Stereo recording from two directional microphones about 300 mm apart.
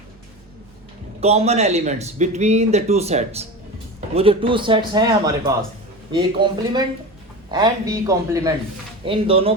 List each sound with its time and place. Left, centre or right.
1.2 s speech: right